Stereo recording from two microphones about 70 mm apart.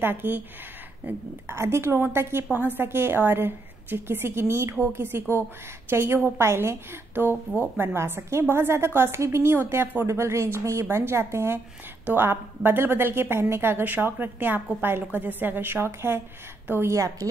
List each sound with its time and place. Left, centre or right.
0.0 s a woman's voice: right
1.5 s a woman's voice: right
16.9 s speech: right